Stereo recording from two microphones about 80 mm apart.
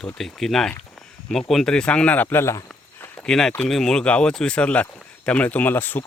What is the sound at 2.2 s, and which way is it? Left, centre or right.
Speech, left.